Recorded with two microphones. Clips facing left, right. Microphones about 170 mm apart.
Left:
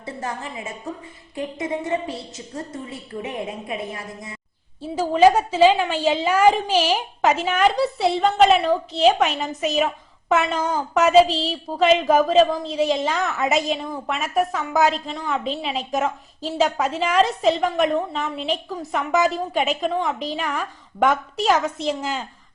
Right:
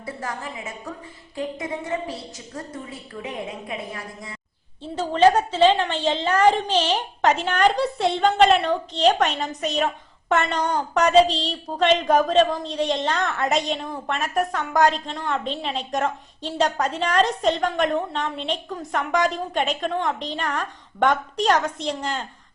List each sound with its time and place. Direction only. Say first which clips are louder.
0.0 s a woman's voice: left 1 dB; 25° left (ahead or behind)
3.7 s a woman's voice: left 3 dB; 25° left (ahead or behind)
4.8 s a woman's voice: left 2 dB; 10° left (ahead or behind)